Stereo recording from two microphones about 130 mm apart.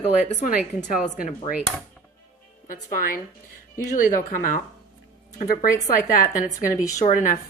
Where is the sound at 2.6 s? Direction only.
90° left.